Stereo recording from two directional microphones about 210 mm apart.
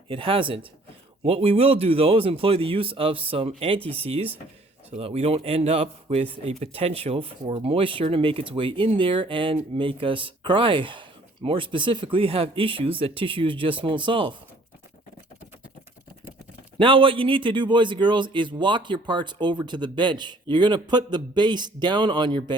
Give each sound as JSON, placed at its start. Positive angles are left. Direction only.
{"t": 0.1, "sound": "a man's voice", "side_deg": -25}
{"t": 16.7, "sound": "a man's voice", "side_deg": -25}